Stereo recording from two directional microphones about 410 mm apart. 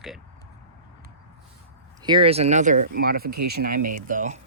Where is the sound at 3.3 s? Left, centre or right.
Right.